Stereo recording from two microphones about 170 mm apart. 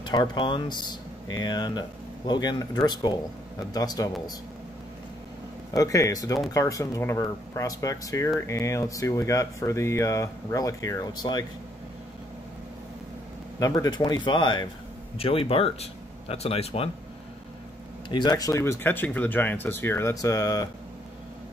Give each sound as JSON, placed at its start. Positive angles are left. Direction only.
{"t": 0.0, "sound": "speech", "side_deg": 25}
{"t": 5.7, "sound": "speech", "side_deg": 20}
{"t": 13.6, "sound": "speech", "side_deg": 20}
{"t": 18.1, "sound": "speech", "side_deg": 25}